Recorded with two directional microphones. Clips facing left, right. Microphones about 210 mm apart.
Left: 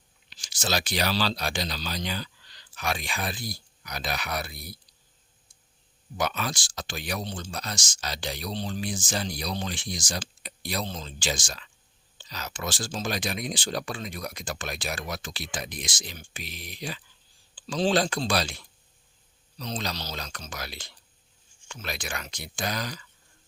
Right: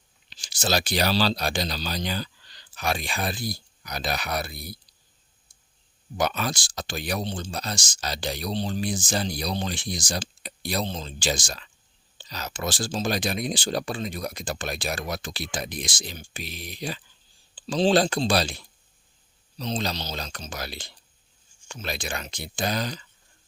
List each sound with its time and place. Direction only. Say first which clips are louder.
0.3 s speech: right 4 dB; 30° right (ahead or behind)
6.1 s speech: right 3 dB; 35° right (ahead or behind)